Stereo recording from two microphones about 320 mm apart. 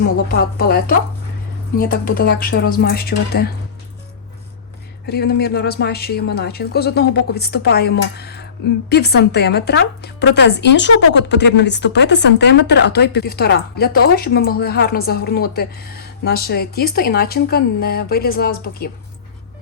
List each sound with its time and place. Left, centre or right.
0.3 s a woman's voice: left
5.0 s a woman's voice: left